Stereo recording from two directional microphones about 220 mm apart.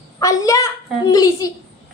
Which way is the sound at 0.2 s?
15° left (ahead or behind).